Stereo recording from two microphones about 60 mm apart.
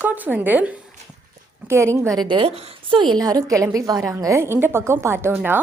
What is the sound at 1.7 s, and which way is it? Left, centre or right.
Speech, right.